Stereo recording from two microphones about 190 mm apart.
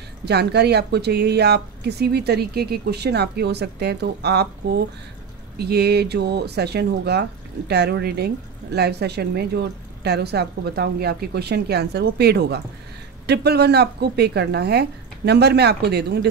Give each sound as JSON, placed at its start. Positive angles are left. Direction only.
{"t": 0.2, "sound": "speech", "side_deg": -60}